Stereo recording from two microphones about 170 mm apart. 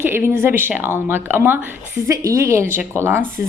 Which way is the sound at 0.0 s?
15° right (ahead or behind).